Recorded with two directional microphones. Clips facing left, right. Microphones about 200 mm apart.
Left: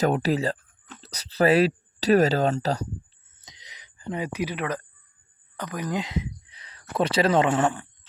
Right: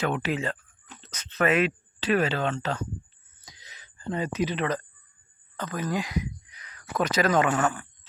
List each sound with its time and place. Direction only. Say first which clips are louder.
0.0 s speech: left 5 dB; 40° left (ahead or behind)
3.4 s a sound: even; 20° left (ahead or behind)
6.9 s speech: left 2 dB; 30° left (ahead or behind)